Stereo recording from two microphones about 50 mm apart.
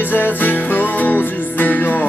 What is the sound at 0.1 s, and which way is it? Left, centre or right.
Music, left.